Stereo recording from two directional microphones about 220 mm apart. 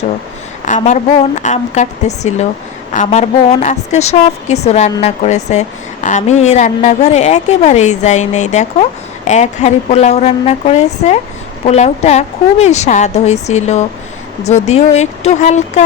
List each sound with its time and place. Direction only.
1.4 s a woman's voice: 30° left (ahead or behind)